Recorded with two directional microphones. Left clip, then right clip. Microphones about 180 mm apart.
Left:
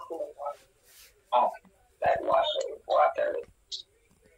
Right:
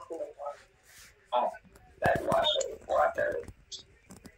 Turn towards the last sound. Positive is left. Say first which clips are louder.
# left 3 dB
turn(degrees=-5)  # may be behind; listen again after turning